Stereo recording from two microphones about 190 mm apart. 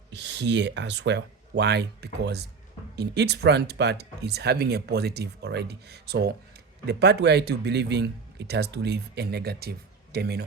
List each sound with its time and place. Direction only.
0.1 s speech: 65° right (ahead or behind)